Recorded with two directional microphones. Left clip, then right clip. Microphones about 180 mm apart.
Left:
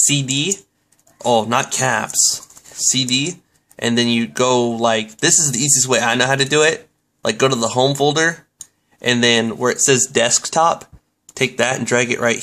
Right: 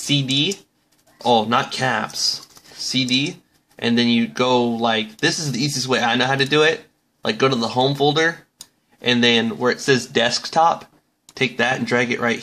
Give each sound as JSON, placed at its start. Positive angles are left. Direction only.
{"t": 0.0, "sound": "speech", "side_deg": 20}